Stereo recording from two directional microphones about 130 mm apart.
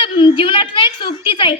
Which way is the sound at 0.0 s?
40° left (ahead or behind).